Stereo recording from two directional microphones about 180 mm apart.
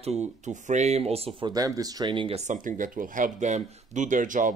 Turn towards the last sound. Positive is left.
turn(degrees=-45)  # may be behind; listen again after turning